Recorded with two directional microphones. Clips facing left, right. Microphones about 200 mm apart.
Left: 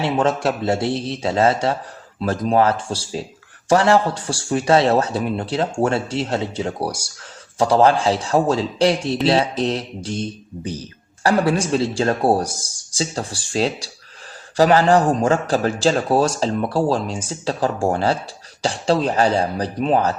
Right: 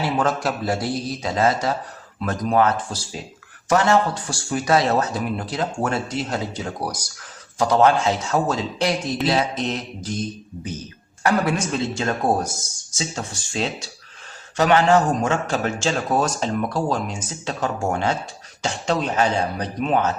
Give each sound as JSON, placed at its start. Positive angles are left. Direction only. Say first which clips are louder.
{"t": 0.0, "sound": "speech", "louder": "left 3 dB", "side_deg": 25}